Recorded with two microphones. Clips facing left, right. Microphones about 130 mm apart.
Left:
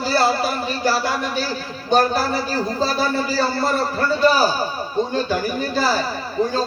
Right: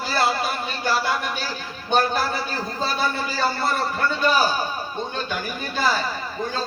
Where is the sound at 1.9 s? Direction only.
40° left (ahead or behind).